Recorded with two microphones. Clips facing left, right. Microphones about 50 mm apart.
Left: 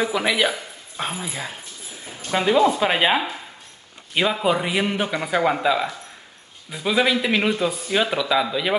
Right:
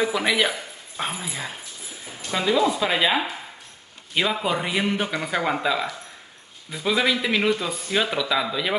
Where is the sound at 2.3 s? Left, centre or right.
Left.